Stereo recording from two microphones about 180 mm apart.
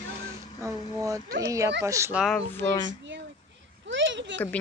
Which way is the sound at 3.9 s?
90° right.